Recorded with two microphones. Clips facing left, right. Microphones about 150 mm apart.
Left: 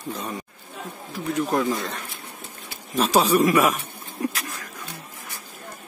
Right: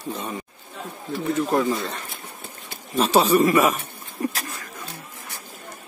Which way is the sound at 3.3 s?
Centre (ahead or behind).